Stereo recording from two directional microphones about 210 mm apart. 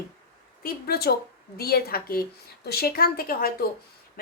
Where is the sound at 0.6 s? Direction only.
50° left (ahead or behind).